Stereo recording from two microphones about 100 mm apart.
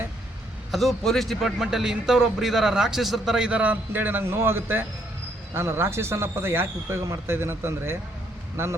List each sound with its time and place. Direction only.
0.7 s a man's voice: centre (ahead or behind); by 7.9 s 25° right (ahead or behind)